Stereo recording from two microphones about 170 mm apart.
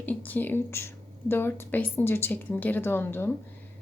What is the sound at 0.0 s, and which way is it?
Speech, 10° left (ahead or behind).